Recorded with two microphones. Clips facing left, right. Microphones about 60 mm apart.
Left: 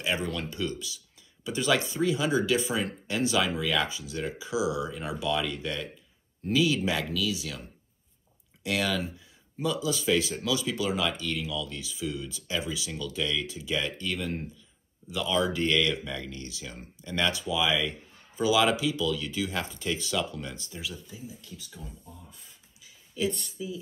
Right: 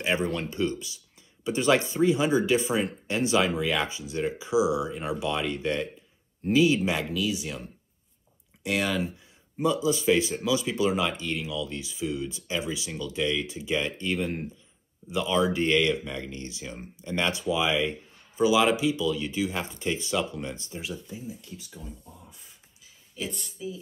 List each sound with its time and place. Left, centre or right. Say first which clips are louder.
0.0 s speech: right 3 dB; right
8.6 s speech: right 2 dB; centre